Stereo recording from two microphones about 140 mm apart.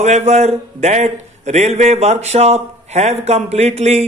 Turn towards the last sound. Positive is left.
turn(degrees=-50)  # may be behind; listen again after turning